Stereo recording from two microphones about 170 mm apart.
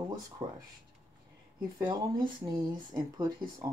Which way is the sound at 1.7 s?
25° right (ahead or behind).